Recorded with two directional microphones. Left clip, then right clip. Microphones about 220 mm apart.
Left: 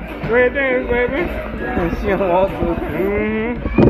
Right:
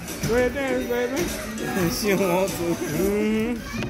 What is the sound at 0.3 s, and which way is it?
Speech, 50° right (ahead or behind).